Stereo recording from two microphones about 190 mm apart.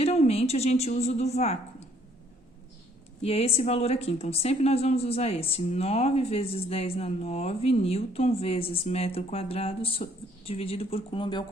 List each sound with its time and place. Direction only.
0.0 s speech: 35° left (ahead or behind)
3.2 s speech: 30° left (ahead or behind)